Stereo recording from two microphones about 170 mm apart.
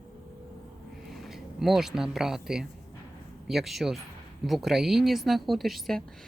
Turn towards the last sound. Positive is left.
turn(degrees=0)  # may be behind; listen again after turning